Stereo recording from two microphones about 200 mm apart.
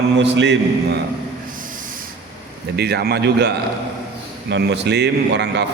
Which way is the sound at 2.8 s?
55° right (ahead or behind).